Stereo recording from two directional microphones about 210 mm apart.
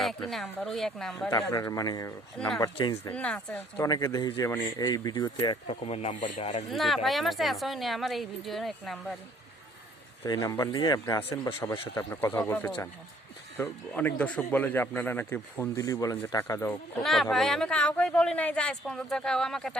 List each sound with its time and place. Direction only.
0.3 s speech: centre (ahead or behind)
1.3 s speech: 15° left (ahead or behind)
6.7 s speech: centre (ahead or behind)
10.2 s speech: 15° left (ahead or behind)